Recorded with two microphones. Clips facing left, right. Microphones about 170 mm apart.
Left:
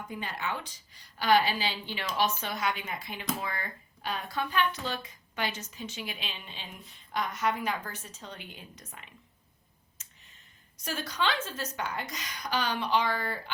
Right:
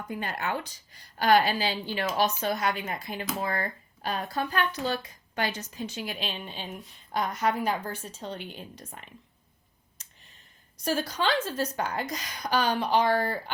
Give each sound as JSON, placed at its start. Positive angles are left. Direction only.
{"t": 0.1, "sound": "speech", "side_deg": -50}
{"t": 10.8, "sound": "speech", "side_deg": -35}